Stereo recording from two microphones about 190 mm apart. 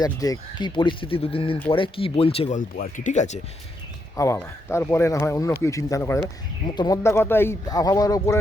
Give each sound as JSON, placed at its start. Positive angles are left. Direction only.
{"t": 0.0, "sound": "speech", "side_deg": 20}
{"t": 4.2, "sound": "speech", "side_deg": 15}